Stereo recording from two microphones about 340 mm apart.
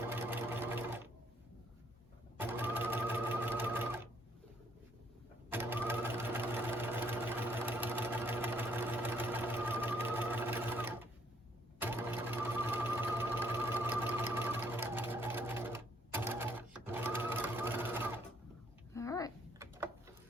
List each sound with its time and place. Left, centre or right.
0.0 s sewing machine: centre
2.4 s sewing machine: centre
5.5 s sewing machine: centre
18.9 s babbling: centre